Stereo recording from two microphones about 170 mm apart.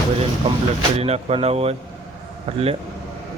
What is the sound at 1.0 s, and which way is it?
Speech, 35° right (ahead or behind).